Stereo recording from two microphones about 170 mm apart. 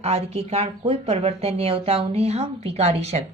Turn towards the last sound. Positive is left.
turn(degrees=-40)  # may be behind; listen again after turning